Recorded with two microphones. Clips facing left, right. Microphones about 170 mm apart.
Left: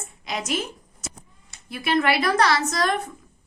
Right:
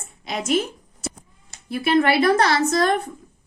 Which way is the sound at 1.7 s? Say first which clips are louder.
Right 4 dB; 30° right (ahead or behind).